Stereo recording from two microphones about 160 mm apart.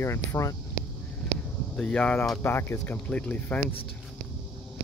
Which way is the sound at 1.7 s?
10° left (ahead or behind).